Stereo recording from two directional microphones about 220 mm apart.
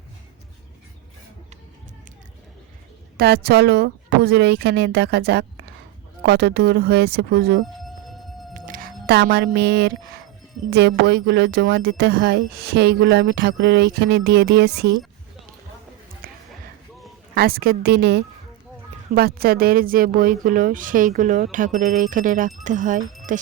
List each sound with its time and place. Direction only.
3.2 s speech: 45° right (ahead or behind)
7.8 s music: centre (ahead or behind)
8.5 s music: 40° right (ahead or behind)
10.7 s speech: 50° right (ahead or behind)
16.2 s music: 40° right (ahead or behind)
17.3 s speech: 45° right (ahead or behind)